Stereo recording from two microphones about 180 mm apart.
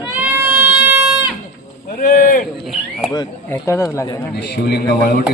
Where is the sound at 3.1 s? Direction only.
15° left (ahead or behind).